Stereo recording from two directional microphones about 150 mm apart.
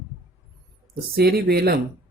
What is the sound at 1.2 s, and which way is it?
Speech, 90° right.